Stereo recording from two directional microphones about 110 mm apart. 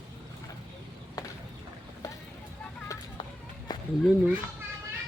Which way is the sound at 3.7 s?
40° left (ahead or behind).